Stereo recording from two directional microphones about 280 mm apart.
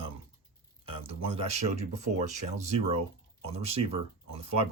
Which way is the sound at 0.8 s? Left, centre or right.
Centre.